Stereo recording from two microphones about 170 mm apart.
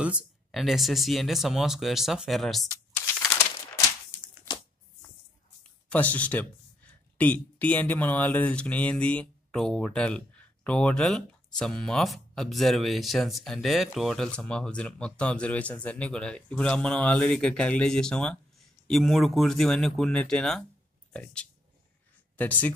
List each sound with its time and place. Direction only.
0.0 s speech: 5° right (ahead or behind)
2.7 s a sound: 20° left (ahead or behind)
5.9 s speech: 10° left (ahead or behind)